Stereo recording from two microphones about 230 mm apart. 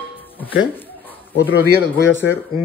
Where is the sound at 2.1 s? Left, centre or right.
Centre.